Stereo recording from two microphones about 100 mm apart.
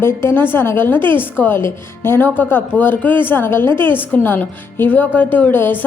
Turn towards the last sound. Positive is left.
turn(degrees=20)  # may be behind; listen again after turning